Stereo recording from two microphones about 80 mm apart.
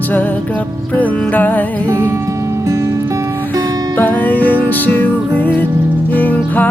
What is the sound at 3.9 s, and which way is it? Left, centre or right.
Music, left.